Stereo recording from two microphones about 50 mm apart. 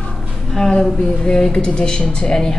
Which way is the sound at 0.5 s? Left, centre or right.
Centre.